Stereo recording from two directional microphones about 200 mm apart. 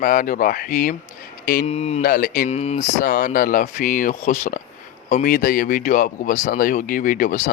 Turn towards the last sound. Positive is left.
turn(degrees=40)  # may be behind; listen again after turning